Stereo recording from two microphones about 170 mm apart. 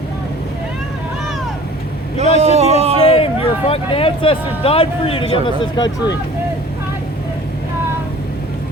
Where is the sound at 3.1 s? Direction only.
35° left (ahead or behind).